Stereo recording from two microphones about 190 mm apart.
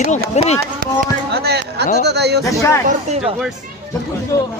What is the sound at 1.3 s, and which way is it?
Speech, 55° right (ahead or behind).